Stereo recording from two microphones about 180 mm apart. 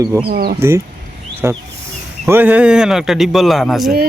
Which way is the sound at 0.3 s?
55° right (ahead or behind).